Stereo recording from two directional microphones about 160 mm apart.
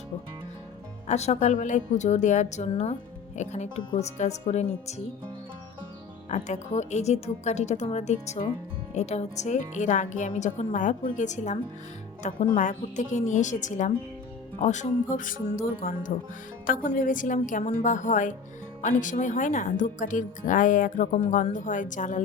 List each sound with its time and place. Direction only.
1.0 s speech: 45° left (ahead or behind)
6.2 s speech: 50° left (ahead or behind)